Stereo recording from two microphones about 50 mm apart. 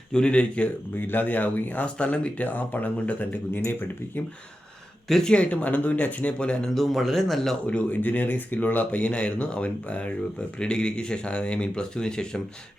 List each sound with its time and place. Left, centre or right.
0.1 s speech: centre
0.9 s speech: left
5.0 s speech: centre
5.3 s speech: left
6.7 s speech: centre
7.7 s speech: left; by 12.4 s centre